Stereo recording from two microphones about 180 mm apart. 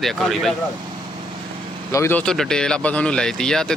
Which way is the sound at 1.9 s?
15° left (ahead or behind).